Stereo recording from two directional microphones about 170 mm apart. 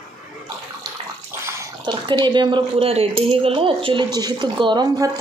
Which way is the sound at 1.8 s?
25° right (ahead or behind).